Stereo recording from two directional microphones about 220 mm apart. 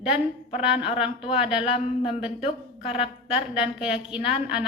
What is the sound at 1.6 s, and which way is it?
Speech, 25° left (ahead or behind).